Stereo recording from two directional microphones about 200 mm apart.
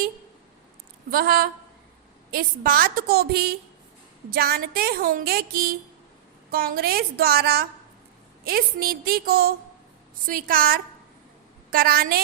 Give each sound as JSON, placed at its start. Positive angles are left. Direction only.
{"t": 1.1, "sound": "speech", "side_deg": -50}